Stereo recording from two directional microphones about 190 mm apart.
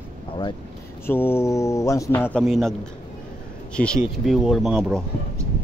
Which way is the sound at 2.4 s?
Centre (ahead or behind).